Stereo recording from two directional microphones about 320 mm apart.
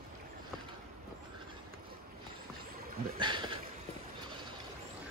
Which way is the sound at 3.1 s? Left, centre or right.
Centre.